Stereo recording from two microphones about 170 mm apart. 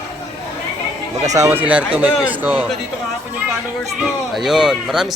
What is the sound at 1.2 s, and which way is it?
Speech, 20° right (ahead or behind).